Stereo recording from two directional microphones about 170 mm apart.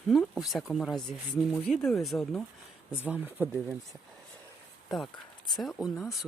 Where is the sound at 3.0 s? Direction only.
10° right (ahead or behind).